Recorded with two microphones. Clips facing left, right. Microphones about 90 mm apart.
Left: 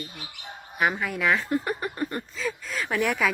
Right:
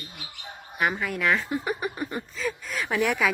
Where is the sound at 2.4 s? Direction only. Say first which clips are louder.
Right 1 dB; centre (ahead or behind).